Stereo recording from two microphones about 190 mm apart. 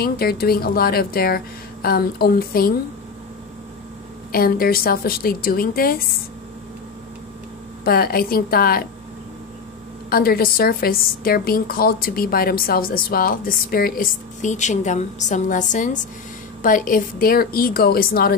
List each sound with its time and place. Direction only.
0.0 s a woman's voice: 55° left (ahead or behind)
4.3 s a woman's voice: 50° left (ahead or behind)
7.8 s a woman's voice: 50° left (ahead or behind)
10.0 s a woman's voice: 50° left (ahead or behind)